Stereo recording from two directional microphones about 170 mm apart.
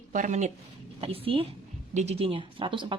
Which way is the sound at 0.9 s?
35° right (ahead or behind).